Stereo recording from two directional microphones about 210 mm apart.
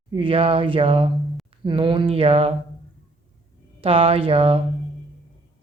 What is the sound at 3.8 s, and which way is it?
Mantra, 25° right (ahead or behind).